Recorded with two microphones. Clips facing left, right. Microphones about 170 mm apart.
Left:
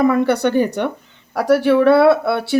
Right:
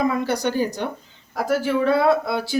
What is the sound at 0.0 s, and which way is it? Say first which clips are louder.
Speech: left 7 dB; 60° left (ahead or behind).